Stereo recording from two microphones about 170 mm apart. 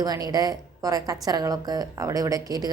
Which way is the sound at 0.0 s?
20° right (ahead or behind).